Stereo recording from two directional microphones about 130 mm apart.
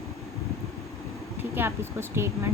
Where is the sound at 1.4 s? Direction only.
15° right (ahead or behind).